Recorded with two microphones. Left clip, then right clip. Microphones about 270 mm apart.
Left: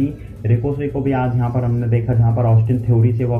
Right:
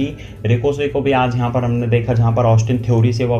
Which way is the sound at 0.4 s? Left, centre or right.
Right.